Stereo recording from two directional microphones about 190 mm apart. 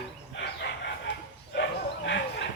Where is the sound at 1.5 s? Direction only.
65° left (ahead or behind).